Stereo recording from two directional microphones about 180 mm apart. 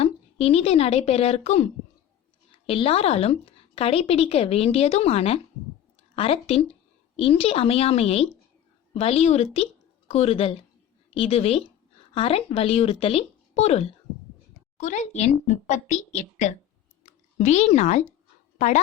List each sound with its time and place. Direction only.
0.0 s a woman's voice: 35° left (ahead or behind)
17.0 s a sound: 40° left (ahead or behind)
18.5 s dog: 40° left (ahead or behind)